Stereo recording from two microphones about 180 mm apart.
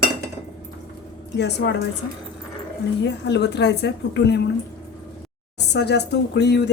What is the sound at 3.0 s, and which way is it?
Speech, 70° left (ahead or behind).